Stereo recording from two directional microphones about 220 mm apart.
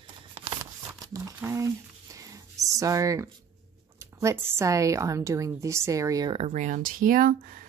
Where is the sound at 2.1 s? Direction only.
15° right (ahead or behind).